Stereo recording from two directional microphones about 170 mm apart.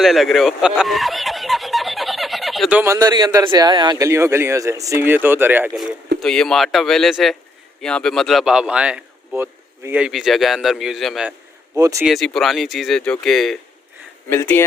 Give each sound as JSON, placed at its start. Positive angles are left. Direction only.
{"t": 0.0, "sound": "speech", "side_deg": 0}
{"t": 6.1, "sound": "speech", "side_deg": 5}
{"t": 11.8, "sound": "speech", "side_deg": -20}
{"t": 12.0, "sound": "speech", "side_deg": 0}
{"t": 14.3, "sound": "speech", "side_deg": 10}